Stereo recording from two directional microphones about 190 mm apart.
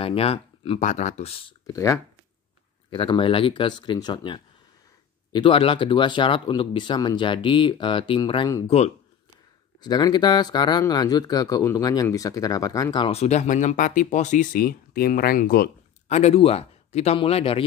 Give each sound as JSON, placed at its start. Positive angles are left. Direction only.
{"t": 0.0, "sound": "a man's voice", "side_deg": 30}
{"t": 1.7, "sound": "speech", "side_deg": 15}
{"t": 2.9, "sound": "speech", "side_deg": 25}
{"t": 8.6, "sound": "a man's voice", "side_deg": 35}
{"t": 9.8, "sound": "speech", "side_deg": 20}
{"t": 16.1, "sound": "a man's voice", "side_deg": 35}